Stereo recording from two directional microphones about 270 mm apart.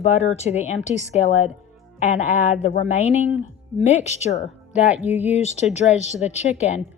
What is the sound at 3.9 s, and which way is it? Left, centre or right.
Speech, left.